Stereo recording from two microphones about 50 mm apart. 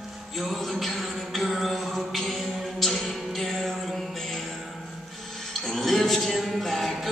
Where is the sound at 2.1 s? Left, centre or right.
Centre.